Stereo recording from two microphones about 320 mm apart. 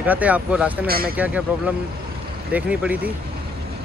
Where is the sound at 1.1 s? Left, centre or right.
Centre.